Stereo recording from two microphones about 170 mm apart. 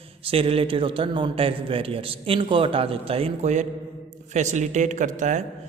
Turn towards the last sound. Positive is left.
turn(degrees=-45)  # may be behind; listen again after turning